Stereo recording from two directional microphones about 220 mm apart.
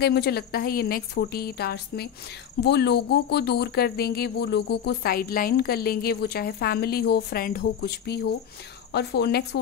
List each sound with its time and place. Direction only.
0.0 s speech: 45° left (ahead or behind)